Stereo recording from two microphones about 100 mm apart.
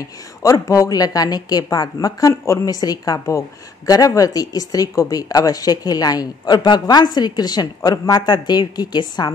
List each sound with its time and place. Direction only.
0.4 s speech: 30° left (ahead or behind)